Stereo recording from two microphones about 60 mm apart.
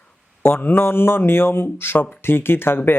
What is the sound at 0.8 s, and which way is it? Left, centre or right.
Speech, left.